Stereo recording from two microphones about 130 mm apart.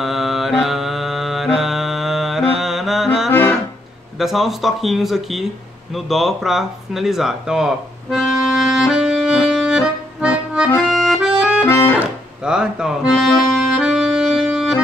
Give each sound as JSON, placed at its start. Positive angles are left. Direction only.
{"t": 0.0, "sound": "mantra", "side_deg": 0}
{"t": 3.3, "sound": "music", "side_deg": 15}
{"t": 4.2, "sound": "speech", "side_deg": 0}
{"t": 5.9, "sound": "a sound", "side_deg": 0}
{"t": 10.9, "sound": "accordion", "side_deg": -5}